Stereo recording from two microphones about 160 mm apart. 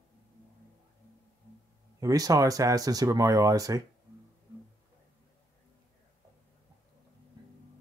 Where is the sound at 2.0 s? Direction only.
20° right (ahead or behind).